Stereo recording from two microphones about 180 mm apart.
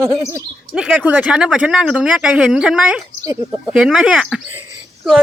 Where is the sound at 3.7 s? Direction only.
5° right (ahead or behind).